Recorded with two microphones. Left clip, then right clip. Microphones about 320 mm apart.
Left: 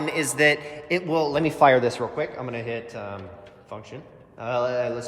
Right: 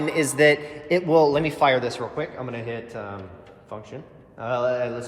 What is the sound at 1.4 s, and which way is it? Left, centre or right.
A man's voice, left.